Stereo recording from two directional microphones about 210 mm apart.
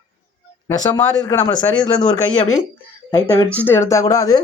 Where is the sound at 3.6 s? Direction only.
10° left (ahead or behind).